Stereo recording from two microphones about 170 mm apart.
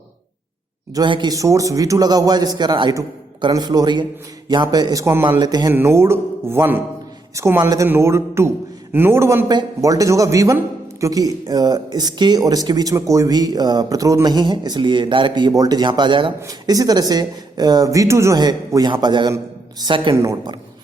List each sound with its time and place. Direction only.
0.9 s a man's voice: 25° right (ahead or behind)